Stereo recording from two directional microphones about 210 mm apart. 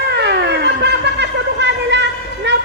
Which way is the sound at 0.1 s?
55° right (ahead or behind).